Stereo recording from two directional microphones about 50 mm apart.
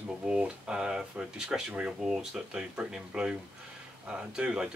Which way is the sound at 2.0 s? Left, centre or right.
Centre.